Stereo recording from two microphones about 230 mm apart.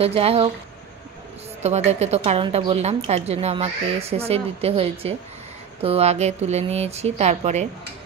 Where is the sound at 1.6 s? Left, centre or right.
Right.